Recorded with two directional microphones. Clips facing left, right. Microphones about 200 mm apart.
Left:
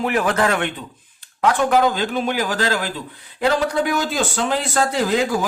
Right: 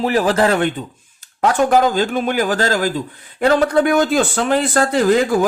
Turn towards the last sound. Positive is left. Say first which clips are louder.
# right 5 dB
turn(degrees=-50)  # may be behind; listen again after turning